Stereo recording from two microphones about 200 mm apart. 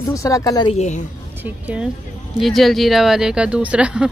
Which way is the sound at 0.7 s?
35° left (ahead or behind).